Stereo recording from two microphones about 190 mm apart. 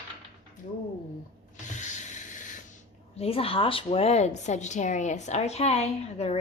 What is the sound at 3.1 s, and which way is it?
Speech, 30° left (ahead or behind).